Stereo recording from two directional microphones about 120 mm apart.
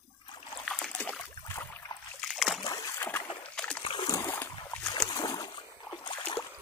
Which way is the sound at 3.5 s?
10° left (ahead or behind).